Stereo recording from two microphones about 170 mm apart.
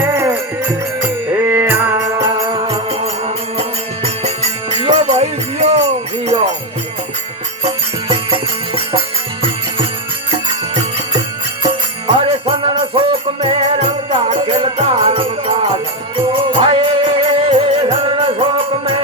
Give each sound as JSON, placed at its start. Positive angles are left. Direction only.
{"t": 0.0, "sound": "music", "side_deg": -15}
{"t": 1.4, "sound": "music", "side_deg": -10}
{"t": 7.6, "sound": "music", "side_deg": -30}
{"t": 11.6, "sound": "jingle bell", "side_deg": -30}
{"t": 16.1, "sound": "music", "side_deg": -30}